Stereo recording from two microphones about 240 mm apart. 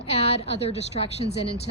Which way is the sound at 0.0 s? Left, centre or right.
Left.